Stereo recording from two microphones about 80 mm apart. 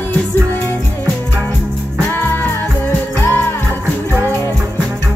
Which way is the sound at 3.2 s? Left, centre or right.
Left.